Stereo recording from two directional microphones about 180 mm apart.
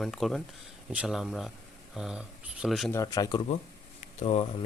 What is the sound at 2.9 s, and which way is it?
Speech, 20° left (ahead or behind).